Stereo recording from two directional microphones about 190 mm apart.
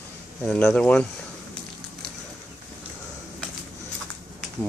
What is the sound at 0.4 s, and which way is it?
Speech, 5° left (ahead or behind).